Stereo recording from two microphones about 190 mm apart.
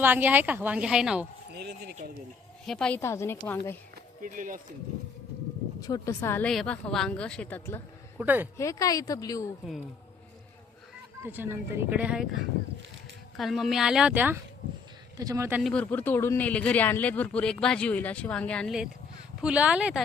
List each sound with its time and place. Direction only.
0.0 s speech: 10° right (ahead or behind)
1.5 s speech: 60° right (ahead or behind)
2.6 s a man's voice: 5° left (ahead or behind)
3.9 s speech: 45° right (ahead or behind)
5.8 s a man's voice: 15° left (ahead or behind)
8.2 s speech: 10° right (ahead or behind)
8.5 s a woman's voice: 15° left (ahead or behind)
11.2 s speech: 10° right (ahead or behind)
13.3 s speech: centre (ahead or behind)
15.6 s a man's voice: 5° left (ahead or behind)